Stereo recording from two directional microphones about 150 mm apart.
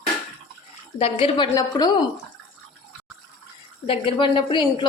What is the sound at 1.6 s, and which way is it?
Speech, 25° left (ahead or behind).